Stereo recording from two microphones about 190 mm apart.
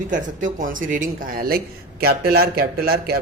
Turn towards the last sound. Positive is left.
turn(degrees=-55)  # may be behind; listen again after turning